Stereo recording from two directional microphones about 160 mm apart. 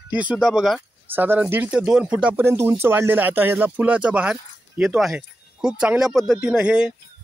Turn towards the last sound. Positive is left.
turn(degrees=-5)  # may be behind; listen again after turning